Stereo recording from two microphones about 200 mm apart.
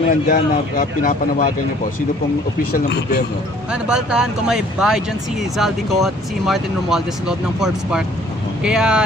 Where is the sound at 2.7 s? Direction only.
55° left (ahead or behind).